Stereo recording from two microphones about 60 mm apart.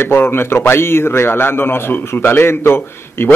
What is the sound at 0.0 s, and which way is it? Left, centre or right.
A man's voice, left.